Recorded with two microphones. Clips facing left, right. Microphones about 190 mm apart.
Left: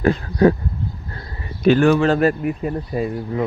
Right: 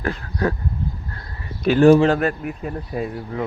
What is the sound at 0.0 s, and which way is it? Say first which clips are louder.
Speech: left 8 dB; 20° left (ahead or behind).